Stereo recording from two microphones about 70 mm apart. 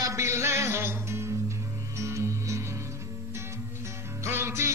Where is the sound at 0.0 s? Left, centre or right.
Right.